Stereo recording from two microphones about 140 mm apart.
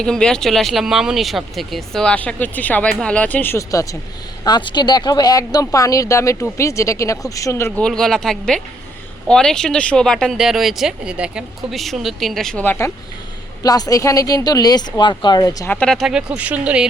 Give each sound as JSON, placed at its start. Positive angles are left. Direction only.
{"t": 0.0, "sound": "speech", "side_deg": 5}
{"t": 7.8, "sound": "speech", "side_deg": 5}
{"t": 13.6, "sound": "speech", "side_deg": 25}
{"t": 15.7, "sound": "speech", "side_deg": 5}